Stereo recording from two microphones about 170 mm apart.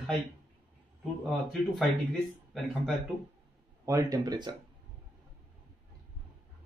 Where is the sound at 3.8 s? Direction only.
20° right (ahead or behind).